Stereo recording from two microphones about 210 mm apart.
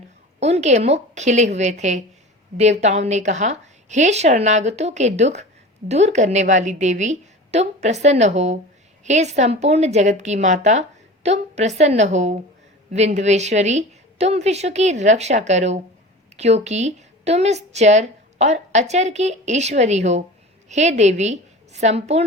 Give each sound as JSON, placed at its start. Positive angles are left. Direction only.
{"t": 0.3, "sound": "a woman's voice", "side_deg": -30}